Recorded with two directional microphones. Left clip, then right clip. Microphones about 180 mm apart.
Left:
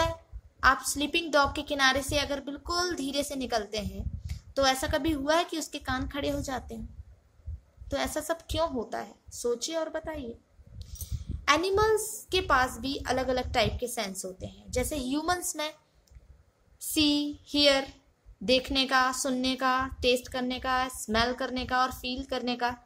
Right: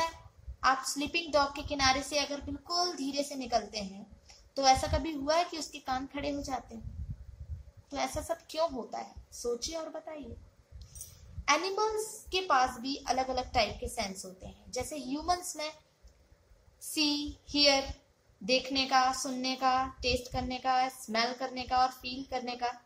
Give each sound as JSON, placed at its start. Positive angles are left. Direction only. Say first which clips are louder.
{"t": 0.6, "sound": "a woman's voice", "louder": "left 4 dB", "side_deg": 50}
{"t": 7.9, "sound": "a woman's voice", "louder": "left 4 dB", "side_deg": 55}
{"t": 11.4, "sound": "a woman's voice", "louder": "left 5 dB", "side_deg": 55}
{"t": 16.9, "sound": "a woman's voice", "louder": "left 5 dB", "side_deg": 50}